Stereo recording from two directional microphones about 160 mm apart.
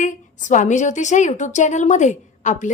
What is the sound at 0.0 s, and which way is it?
A woman's voice, 50° left (ahead or behind).